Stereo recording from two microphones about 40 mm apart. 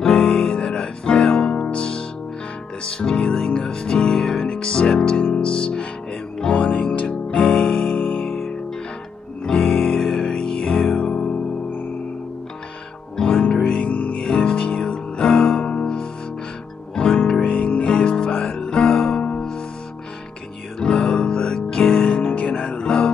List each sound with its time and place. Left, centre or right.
0.1 s music: centre
6.5 s music: left
8.3 s music: centre
9.4 s music: centre
13.5 s music: centre
13.8 s music: left
14.2 s music: left
20.8 s music: left